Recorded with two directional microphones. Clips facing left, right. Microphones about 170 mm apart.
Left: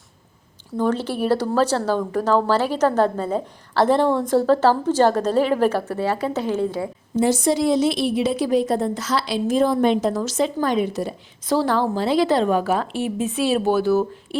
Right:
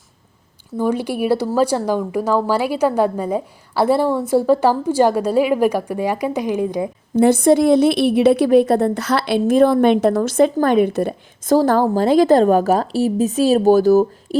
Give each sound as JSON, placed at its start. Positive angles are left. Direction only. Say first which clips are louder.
{"t": 0.8, "sound": "speech", "louder": "right 2 dB", "side_deg": -10}
{"t": 7.2, "sound": "a woman's voice", "louder": "right 6 dB", "side_deg": -55}